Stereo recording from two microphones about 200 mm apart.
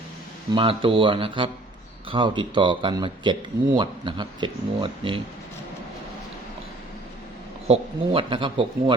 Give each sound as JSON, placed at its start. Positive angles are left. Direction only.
{"t": 0.5, "sound": "speech", "side_deg": -25}
{"t": 7.7, "sound": "speech", "side_deg": -25}